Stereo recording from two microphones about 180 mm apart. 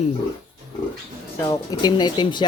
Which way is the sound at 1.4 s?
20° left (ahead or behind).